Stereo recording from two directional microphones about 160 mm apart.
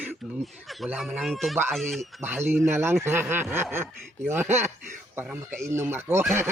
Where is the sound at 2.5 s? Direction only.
15° right (ahead or behind).